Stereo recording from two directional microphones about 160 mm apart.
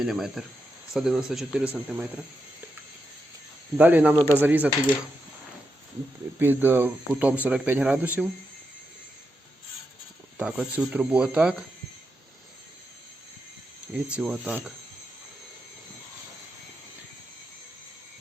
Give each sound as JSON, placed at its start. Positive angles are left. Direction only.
{"t": 0.0, "sound": "speech", "side_deg": 0}
{"t": 3.8, "sound": "speech", "side_deg": -10}
{"t": 6.4, "sound": "speech", "side_deg": -10}
{"t": 10.3, "sound": "speech", "side_deg": -5}
{"t": 13.9, "sound": "speech", "side_deg": -5}